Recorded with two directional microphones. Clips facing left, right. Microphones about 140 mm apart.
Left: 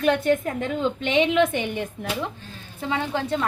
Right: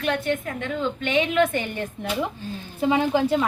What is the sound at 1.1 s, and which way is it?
Speech, 20° left (ahead or behind).